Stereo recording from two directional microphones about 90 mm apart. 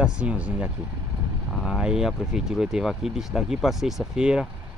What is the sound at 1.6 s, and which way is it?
Speech, 5° right (ahead or behind).